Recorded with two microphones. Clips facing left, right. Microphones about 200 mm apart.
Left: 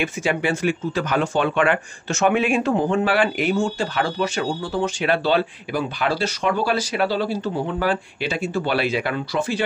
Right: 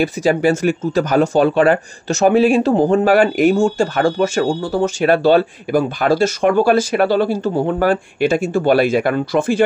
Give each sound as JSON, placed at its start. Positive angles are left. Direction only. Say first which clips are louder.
{"t": 0.0, "sound": "speech", "louder": "right 7 dB", "side_deg": -40}